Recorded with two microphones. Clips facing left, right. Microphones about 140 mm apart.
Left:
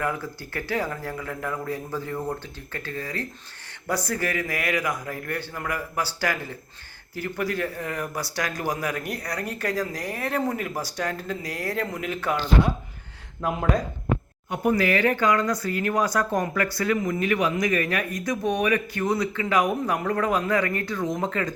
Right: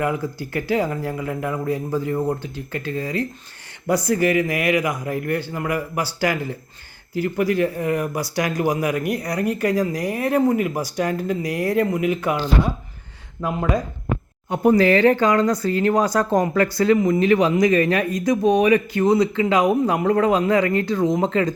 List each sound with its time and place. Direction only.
0.0 s speech: 15° right (ahead or behind)
13.4 s speech: centre (ahead or behind)
14.5 s speech: 30° right (ahead or behind)
16.3 s speech: 20° right (ahead or behind)